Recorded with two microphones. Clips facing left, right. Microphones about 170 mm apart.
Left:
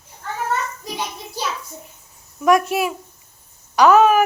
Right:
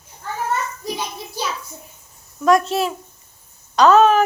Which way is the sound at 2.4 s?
10° left (ahead or behind).